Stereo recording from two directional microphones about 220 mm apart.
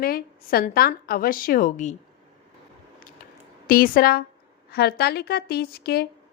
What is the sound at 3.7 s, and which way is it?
A woman's voice, 40° left (ahead or behind).